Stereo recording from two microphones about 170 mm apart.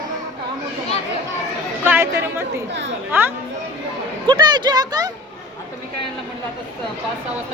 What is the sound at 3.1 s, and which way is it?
Speech, 10° right (ahead or behind).